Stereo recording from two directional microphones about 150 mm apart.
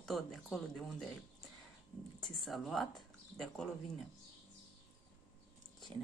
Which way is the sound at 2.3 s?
Centre (ahead or behind).